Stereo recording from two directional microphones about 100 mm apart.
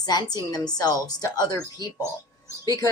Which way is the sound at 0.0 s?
45° left (ahead or behind).